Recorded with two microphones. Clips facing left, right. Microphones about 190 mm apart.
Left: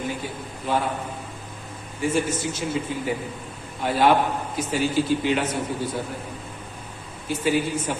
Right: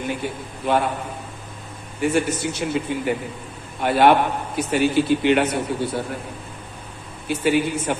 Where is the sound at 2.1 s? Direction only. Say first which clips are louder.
Right 2 dB; 65° right (ahead or behind).